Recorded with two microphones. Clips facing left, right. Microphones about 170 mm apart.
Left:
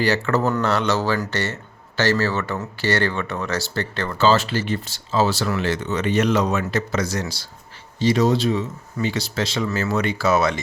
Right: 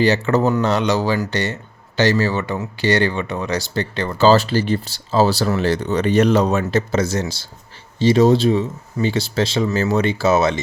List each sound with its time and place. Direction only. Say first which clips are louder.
0.0 s speech: right 4 dB; 20° right (ahead or behind)
4.2 s speech: right 5 dB; 35° right (ahead or behind)